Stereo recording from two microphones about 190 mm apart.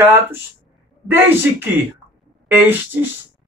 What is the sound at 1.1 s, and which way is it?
Speech, 10° right (ahead or behind).